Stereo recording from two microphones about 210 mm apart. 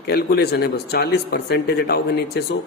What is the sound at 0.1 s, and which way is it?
Speech, 50° left (ahead or behind).